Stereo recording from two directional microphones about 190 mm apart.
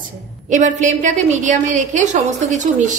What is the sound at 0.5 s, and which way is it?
A woman's voice, 40° right (ahead or behind).